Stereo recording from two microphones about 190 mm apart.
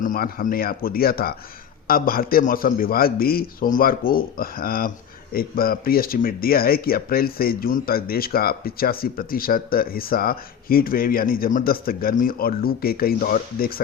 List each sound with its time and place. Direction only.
0.0 s speech: 45° left (ahead or behind)